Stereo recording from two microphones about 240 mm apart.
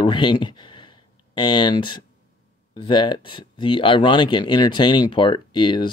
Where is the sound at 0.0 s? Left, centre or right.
Centre.